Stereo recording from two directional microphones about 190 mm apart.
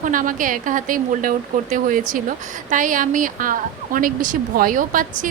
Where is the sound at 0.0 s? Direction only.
45° right (ahead or behind).